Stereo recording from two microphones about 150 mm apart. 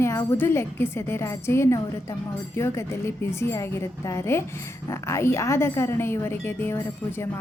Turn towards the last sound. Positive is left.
turn(degrees=15)  # may be behind; listen again after turning